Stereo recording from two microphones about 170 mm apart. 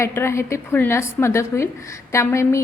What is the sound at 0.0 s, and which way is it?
A woman's voice, 15° left (ahead or behind).